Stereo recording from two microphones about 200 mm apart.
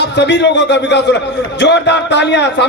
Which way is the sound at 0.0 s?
60° left (ahead or behind).